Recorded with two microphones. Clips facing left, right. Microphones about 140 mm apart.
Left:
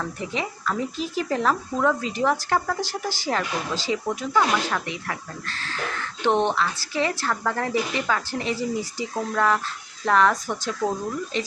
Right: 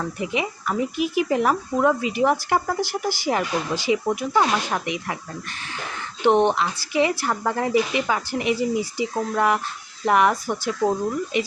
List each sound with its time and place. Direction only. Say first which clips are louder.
0.0 s speech: right 3 dB; 15° right (ahead or behind)